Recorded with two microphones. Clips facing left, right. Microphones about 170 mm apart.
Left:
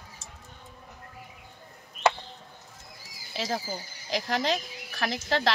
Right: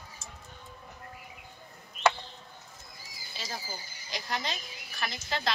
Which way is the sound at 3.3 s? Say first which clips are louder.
Left 9 dB; 80° left.